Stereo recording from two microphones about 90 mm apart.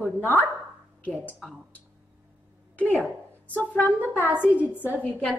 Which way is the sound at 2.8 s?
15° left (ahead or behind).